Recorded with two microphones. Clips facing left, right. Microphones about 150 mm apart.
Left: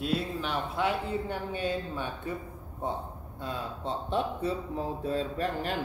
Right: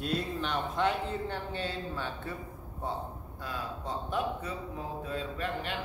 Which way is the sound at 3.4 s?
25° left (ahead or behind).